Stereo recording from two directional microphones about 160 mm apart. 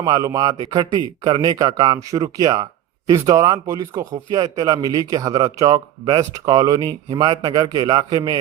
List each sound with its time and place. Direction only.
0.0 s speech: 20° right (ahead or behind)